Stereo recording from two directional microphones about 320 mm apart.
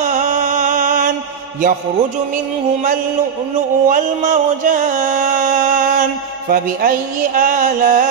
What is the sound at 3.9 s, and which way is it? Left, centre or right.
Music, right.